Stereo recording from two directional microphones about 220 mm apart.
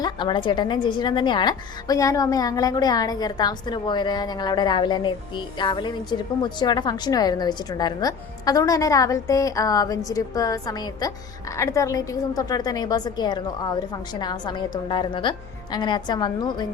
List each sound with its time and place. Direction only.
0.0 s a woman's voice: 20° left (ahead or behind)